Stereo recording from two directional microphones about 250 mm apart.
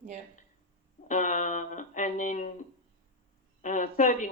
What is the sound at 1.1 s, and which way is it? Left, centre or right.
Speech, left.